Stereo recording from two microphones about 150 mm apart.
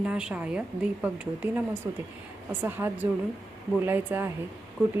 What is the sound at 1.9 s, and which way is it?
A woman's voice, 20° right (ahead or behind).